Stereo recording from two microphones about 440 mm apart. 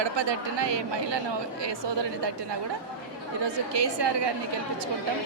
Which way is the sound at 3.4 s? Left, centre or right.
Right.